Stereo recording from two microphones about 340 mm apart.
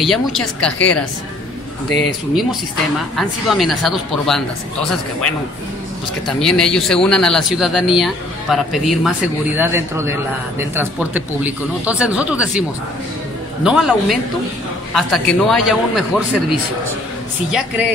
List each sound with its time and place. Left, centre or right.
0.0 s speech: centre
3.2 s speech: centre
6.2 s a man's voice: centre
13.7 s speech: centre
17.5 s speech: centre